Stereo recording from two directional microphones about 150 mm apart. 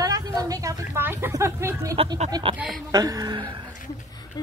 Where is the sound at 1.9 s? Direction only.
35° right (ahead or behind).